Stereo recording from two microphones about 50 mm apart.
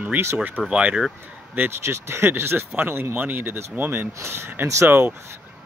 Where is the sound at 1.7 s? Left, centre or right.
Right.